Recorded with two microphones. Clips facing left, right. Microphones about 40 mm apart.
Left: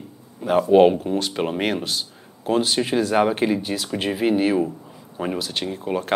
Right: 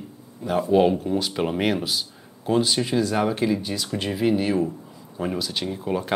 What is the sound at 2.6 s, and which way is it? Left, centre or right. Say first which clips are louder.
Speech: left 1 dB; centre.